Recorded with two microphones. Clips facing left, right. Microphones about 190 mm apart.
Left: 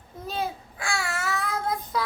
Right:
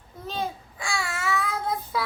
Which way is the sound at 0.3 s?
5° left (ahead or behind).